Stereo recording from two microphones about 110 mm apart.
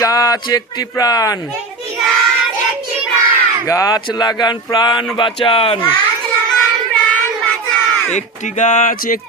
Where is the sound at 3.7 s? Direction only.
30° left (ahead or behind); by 5.8 s 55° left (ahead or behind).